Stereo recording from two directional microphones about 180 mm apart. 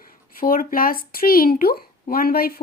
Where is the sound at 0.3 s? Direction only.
55° left (ahead or behind).